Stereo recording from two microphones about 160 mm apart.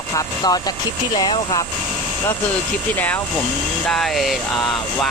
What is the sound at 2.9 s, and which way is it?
Speech, 10° left (ahead or behind).